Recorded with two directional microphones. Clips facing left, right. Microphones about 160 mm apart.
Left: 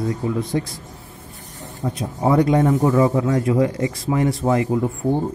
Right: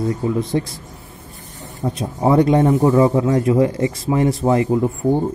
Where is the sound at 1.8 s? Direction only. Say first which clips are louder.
Right 2 dB; 25° right (ahead or behind).